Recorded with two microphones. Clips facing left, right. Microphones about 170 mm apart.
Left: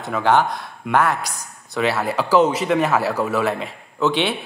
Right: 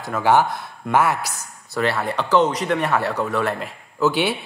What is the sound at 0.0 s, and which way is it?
Speech, 5° right (ahead or behind).